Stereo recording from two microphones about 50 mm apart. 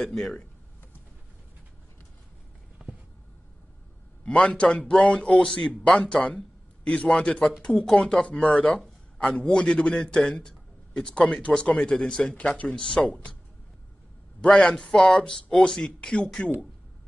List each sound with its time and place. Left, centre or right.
0.0 s speech: centre
2.8 s a sound: centre
4.2 s a man's voice: left
5.9 s a man's voice: centre
12.4 s speech: left
12.6 s speech: centre
14.8 s speech: centre